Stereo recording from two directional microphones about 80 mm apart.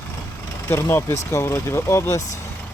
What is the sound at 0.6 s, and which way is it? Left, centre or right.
Speech, left.